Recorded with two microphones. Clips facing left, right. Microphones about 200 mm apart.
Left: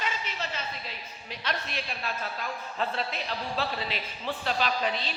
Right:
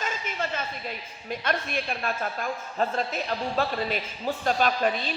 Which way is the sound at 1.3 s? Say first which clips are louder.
Right 6 dB; 50° right (ahead or behind).